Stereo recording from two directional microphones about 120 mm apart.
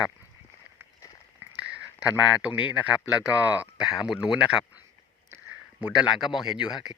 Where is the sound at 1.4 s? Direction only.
10° right (ahead or behind).